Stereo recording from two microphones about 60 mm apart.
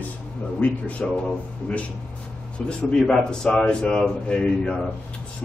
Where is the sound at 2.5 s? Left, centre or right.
Centre.